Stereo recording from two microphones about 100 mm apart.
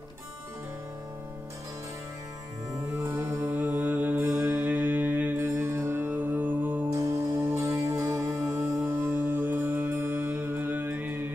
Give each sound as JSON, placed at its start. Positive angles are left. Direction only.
{"t": 3.0, "sound": "music", "side_deg": -30}
{"t": 3.5, "sound": "mantra", "side_deg": -15}
{"t": 4.5, "sound": "music", "side_deg": -15}
{"t": 6.9, "sound": "music", "side_deg": -30}